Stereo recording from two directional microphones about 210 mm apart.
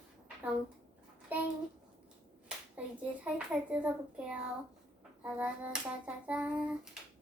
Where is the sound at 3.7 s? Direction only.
5° right (ahead or behind).